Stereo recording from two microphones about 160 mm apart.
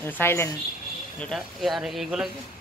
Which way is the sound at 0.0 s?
15° left (ahead or behind).